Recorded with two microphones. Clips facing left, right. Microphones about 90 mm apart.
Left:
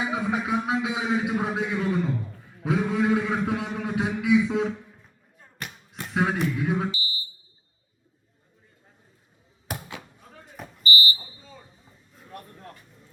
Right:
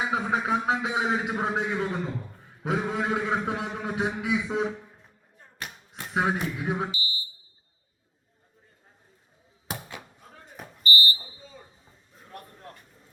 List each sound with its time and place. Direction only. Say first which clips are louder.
0.1 s a man's voice: even; 35° right (ahead or behind)
5.9 s speech: left 1 dB; 25° right (ahead or behind)
10.8 s a sound: left 1 dB; 20° left (ahead or behind)